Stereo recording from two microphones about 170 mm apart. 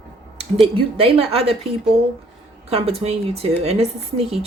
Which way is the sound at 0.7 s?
35° right (ahead or behind).